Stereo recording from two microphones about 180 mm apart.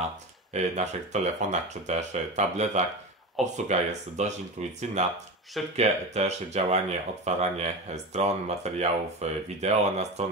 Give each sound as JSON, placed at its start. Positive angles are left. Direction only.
{"t": 0.5, "sound": "speech", "side_deg": -40}